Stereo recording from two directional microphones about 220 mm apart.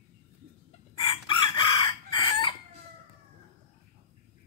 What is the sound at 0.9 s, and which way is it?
Chicken, 20° left (ahead or behind).